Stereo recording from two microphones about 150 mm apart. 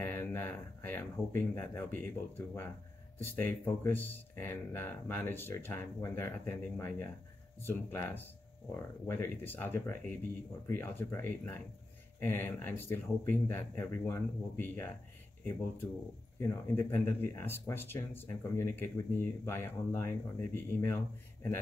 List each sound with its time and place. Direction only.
0.0 s speech: 15° left (ahead or behind)
16.3 s speech: 15° left (ahead or behind)